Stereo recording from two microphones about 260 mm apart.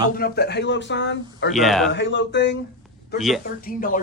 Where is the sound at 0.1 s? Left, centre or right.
Left.